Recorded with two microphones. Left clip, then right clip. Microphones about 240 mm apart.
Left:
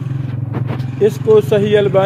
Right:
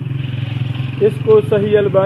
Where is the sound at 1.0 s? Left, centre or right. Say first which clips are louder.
Even; left.